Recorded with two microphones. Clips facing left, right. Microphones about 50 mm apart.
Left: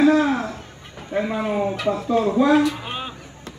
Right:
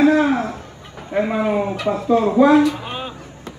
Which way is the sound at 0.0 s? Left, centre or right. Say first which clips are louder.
Right 2 dB; right.